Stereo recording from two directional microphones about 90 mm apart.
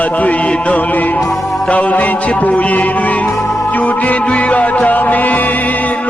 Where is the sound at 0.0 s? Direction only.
15° left (ahead or behind).